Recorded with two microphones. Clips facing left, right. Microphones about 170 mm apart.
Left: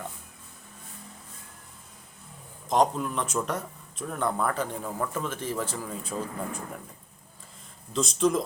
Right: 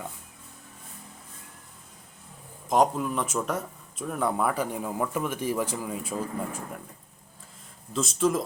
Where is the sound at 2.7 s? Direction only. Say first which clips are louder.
Right 1 dB; 5° right (ahead or behind).